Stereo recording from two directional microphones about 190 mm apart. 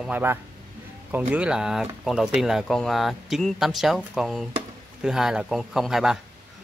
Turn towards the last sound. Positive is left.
turn(degrees=0)  # may be behind; listen again after turning